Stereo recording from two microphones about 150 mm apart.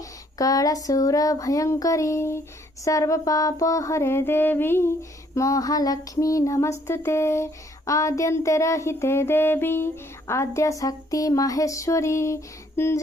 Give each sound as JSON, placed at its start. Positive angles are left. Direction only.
{"t": 0.3, "sound": "female singing", "side_deg": 25}